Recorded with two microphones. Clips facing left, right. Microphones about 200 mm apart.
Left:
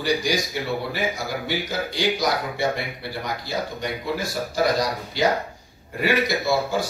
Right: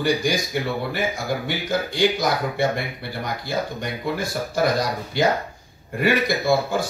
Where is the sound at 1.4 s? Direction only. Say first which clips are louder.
Right 2 dB; 55° right (ahead or behind).